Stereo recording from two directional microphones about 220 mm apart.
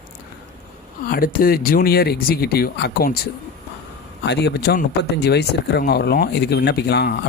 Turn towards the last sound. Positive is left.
turn(degrees=50)  # may be behind; listen again after turning